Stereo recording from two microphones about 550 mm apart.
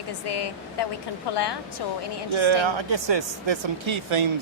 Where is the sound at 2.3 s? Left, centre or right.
Right.